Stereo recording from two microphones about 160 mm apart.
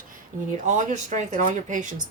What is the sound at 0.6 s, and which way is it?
Speech, 50° right (ahead or behind).